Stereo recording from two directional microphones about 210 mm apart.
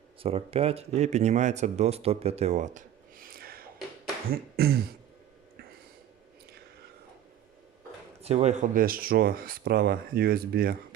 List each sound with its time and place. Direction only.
0.2 s speech: 25° right (ahead or behind); by 4.8 s 45° right (ahead or behind)
8.2 s speech: 30° right (ahead or behind)